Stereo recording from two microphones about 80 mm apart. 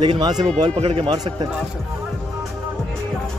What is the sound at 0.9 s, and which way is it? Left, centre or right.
Speech, right.